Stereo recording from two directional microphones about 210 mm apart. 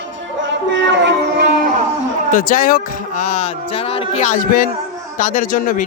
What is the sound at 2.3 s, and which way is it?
A man's voice, 40° left (ahead or behind).